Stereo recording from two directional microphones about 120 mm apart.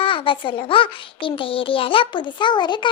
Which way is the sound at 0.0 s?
45° left (ahead or behind).